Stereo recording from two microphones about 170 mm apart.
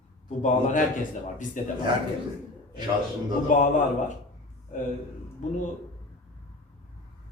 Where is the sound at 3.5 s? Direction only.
50° left (ahead or behind).